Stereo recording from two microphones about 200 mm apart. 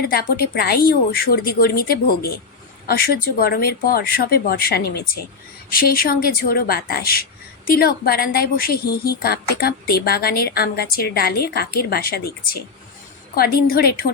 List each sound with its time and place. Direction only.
0.0 s a woman's voice: 50° left (ahead or behind)